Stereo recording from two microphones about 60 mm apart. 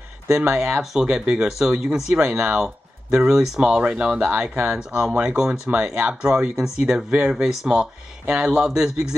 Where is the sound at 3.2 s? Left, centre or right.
Centre.